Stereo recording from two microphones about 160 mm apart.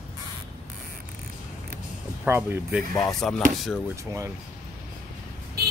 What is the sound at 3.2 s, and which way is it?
Music, 5° left (ahead or behind).